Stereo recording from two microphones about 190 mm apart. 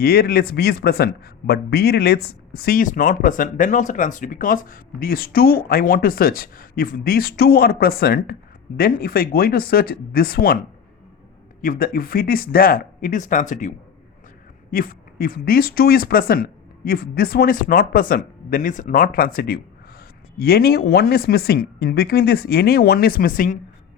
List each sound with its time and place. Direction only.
0.0 s speech: 55° left (ahead or behind)
11.6 s speech: 50° left (ahead or behind)